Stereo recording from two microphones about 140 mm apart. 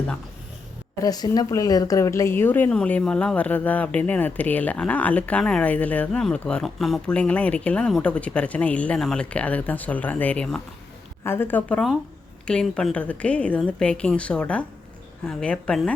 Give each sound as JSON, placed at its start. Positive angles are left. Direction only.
{"t": 1.0, "sound": "a woman's voice", "side_deg": 25}